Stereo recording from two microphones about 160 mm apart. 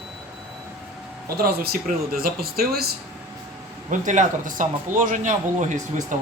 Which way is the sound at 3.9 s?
50° right (ahead or behind).